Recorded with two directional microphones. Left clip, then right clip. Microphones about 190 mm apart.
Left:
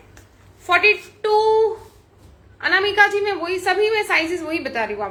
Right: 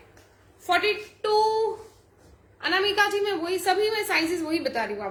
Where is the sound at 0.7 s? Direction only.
25° right (ahead or behind).